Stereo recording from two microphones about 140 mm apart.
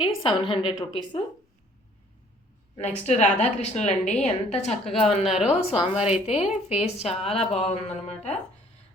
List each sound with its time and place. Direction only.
0.0 s a woman's voice: 35° left (ahead or behind)
3.1 s a woman's voice: 55° left (ahead or behind)
4.9 s a woman's voice: centre (ahead or behind)
5.5 s a woman's voice: 45° left (ahead or behind)